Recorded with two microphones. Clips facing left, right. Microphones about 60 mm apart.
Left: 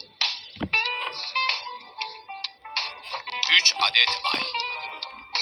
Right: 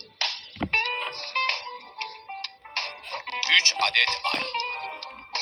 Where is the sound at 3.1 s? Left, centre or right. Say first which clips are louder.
Even; right.